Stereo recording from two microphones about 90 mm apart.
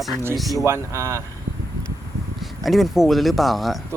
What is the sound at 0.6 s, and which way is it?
Speech, 30° right (ahead or behind).